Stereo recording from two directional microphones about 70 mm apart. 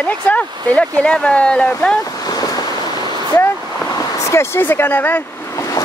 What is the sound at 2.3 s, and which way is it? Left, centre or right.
Waves, left.